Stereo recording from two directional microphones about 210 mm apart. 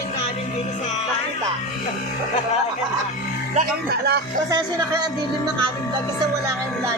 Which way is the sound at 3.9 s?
50° right (ahead or behind).